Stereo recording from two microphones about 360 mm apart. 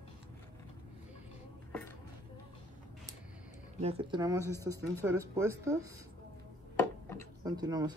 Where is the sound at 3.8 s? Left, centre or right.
Centre.